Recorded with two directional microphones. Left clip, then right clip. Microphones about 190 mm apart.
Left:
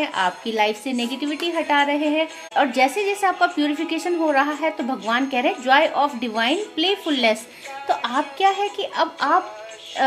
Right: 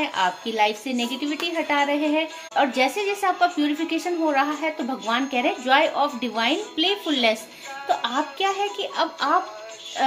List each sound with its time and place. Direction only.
0.0 s a woman's voice: 45° left (ahead or behind)
10.0 s music: 45° left (ahead or behind)